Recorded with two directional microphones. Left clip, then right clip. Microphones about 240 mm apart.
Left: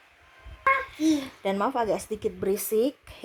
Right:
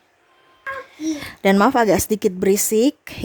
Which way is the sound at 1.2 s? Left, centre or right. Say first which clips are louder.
Right 11 dB; right.